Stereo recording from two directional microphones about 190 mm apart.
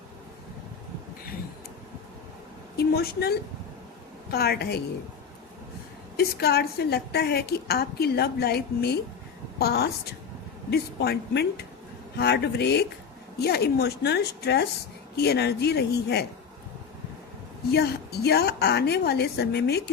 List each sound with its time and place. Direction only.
2.7 s a woman's voice: 55° left (ahead or behind)
6.1 s a woman's voice: 55° left (ahead or behind)
17.7 s a woman's voice: 55° left (ahead or behind)